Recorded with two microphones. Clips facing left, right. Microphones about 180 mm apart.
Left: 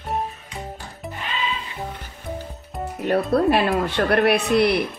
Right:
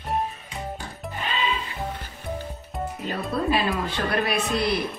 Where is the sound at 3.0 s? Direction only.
65° left (ahead or behind).